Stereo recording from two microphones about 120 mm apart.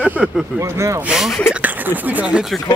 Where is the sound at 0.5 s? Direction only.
25° right (ahead or behind).